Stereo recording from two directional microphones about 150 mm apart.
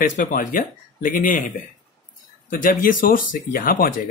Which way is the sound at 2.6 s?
70° left (ahead or behind).